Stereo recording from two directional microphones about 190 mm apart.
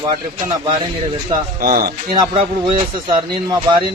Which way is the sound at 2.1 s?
20° right (ahead or behind).